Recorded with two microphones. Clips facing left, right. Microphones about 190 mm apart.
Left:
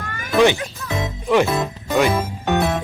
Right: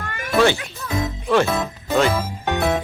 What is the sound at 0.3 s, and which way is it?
Speech, 15° left (ahead or behind).